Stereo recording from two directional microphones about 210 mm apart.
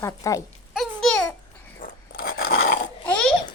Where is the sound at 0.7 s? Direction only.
Centre (ahead or behind).